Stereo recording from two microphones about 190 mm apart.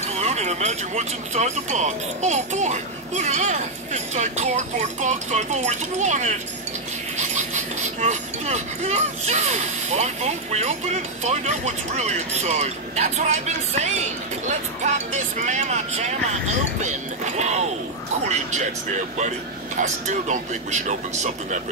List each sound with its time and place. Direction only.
0.0 s speech: 35° right (ahead or behind)
15.3 s speech: 40° right (ahead or behind)
16.8 s speech: 35° right (ahead or behind)
19.8 s speech: 40° right (ahead or behind)